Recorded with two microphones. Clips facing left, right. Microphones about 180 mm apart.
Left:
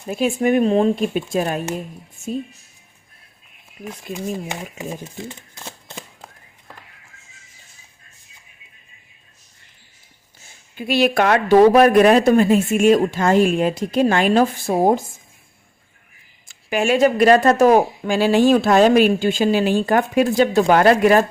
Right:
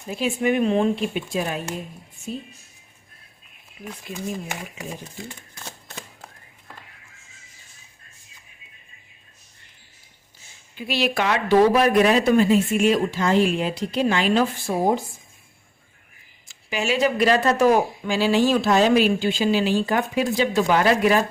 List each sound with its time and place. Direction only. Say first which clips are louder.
0.1 s speech: left 4 dB; 45° left (ahead or behind)
4.4 s speech: left 4 dB; 20° left (ahead or behind)
10.8 s speech: left 6 dB; 50° left (ahead or behind)
16.5 s speech: left 6 dB; 50° left (ahead or behind)